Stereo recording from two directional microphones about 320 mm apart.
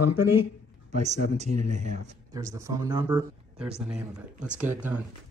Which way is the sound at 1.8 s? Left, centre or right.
Right.